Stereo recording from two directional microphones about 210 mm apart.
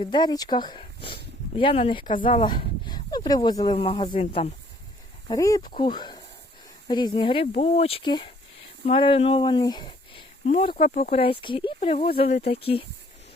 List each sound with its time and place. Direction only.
0.0 s speech: 20° left (ahead or behind)
5.3 s speech: 15° left (ahead or behind)